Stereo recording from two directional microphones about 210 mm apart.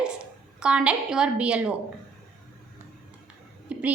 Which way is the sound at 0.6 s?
5° right (ahead or behind).